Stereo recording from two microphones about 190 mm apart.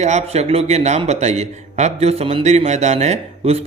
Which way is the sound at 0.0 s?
35° right (ahead or behind).